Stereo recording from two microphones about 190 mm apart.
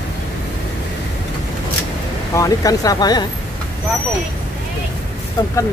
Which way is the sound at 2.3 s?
20° left (ahead or behind).